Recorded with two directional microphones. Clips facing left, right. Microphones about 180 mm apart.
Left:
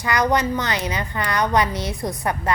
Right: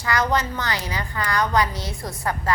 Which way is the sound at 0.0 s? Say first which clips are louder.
Left 3 dB; 20° left (ahead or behind).